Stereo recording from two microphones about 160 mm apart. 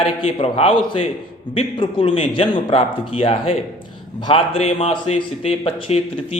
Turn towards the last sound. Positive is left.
turn(degrees=35)  # may be behind; listen again after turning